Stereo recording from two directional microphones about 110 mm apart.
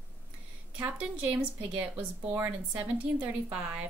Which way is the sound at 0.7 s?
10° right (ahead or behind).